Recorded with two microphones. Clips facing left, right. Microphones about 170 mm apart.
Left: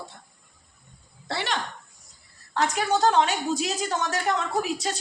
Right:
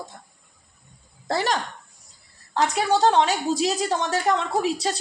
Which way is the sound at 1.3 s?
40° right (ahead or behind).